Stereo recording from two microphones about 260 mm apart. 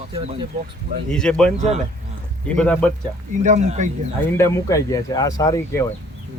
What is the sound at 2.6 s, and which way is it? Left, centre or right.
Speech, centre.